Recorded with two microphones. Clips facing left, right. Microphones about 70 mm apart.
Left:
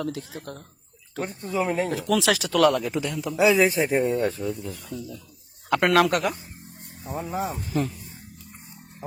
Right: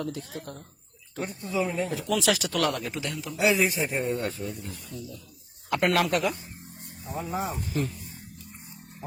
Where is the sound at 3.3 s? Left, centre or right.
Left.